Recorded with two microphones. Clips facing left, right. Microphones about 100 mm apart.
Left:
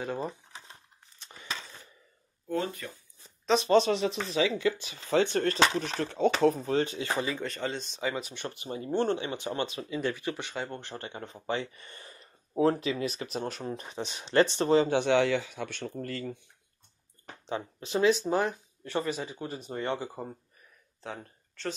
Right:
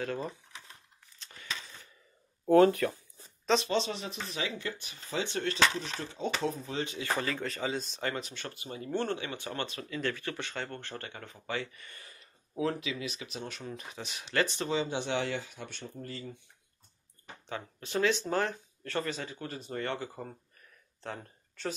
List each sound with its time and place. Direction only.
0.0 s speech: 15° left (ahead or behind)
0.3 s a sound: 30° left (ahead or behind)
2.4 s speech: 65° right (ahead or behind)
3.5 s speech: 5° left (ahead or behind)
3.9 s speech: 90° left
5.2 s speech: 50° left (ahead or behind)
5.8 s speech: 60° left (ahead or behind)
6.3 s speech: 50° left (ahead or behind)
7.0 s speech: 20° left (ahead or behind)
7.3 s speech: centre (ahead or behind); by 14.7 s 30° left (ahead or behind)
14.9 s speech: 70° left (ahead or behind)
17.5 s speech: 20° left (ahead or behind)
21.0 s speech: centre (ahead or behind)